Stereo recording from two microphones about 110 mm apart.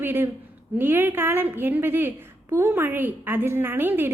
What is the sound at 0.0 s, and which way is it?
A woman's voice, 20° right (ahead or behind).